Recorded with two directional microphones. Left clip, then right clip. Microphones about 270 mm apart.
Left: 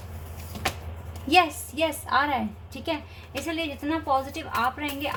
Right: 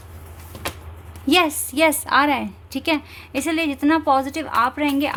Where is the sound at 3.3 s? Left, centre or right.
Right.